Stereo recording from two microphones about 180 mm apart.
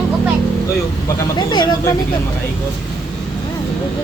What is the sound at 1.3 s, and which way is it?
Speech, 25° left (ahead or behind).